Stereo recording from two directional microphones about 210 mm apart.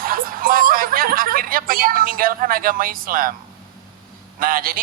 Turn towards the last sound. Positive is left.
turn(degrees=-45)  # may be behind; listen again after turning